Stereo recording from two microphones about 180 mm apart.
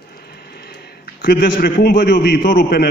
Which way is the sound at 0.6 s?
60° left (ahead or behind).